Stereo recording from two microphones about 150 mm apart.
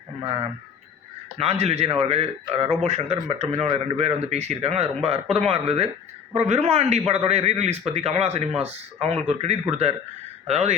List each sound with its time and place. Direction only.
1.4 s speech: 45° right (ahead or behind)